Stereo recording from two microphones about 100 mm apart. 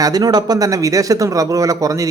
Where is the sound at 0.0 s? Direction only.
40° right (ahead or behind).